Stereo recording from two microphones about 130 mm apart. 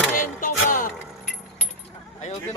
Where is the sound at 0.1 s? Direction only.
90° left.